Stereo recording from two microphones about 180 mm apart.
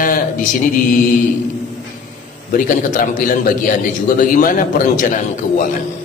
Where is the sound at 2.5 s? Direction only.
45° left (ahead or behind).